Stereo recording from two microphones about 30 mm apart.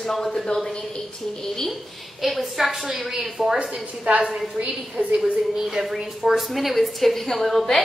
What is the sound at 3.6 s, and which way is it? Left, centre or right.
Speech, right.